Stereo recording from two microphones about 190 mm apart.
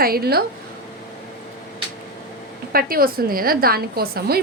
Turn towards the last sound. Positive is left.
turn(degrees=-55)  # may be behind; listen again after turning